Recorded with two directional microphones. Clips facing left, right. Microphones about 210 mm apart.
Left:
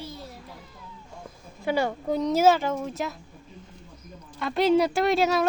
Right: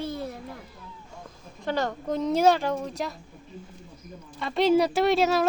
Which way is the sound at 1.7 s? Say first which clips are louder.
Left 2 dB; 10° left (ahead or behind).